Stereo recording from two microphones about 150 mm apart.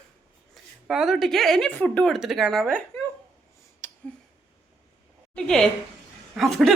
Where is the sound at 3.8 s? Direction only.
15° left (ahead or behind).